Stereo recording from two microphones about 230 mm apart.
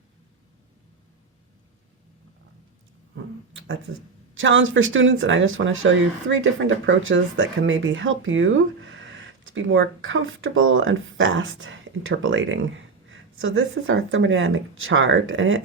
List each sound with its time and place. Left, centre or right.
4.4 s speech: right